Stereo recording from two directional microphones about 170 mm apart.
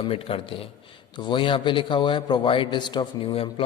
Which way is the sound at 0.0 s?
35° left (ahead or behind).